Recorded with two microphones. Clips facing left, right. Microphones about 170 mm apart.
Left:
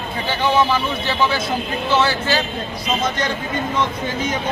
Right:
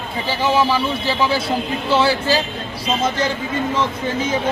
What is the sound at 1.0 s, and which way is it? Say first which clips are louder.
A man's voice: right 1 dB; 30° right (ahead or behind).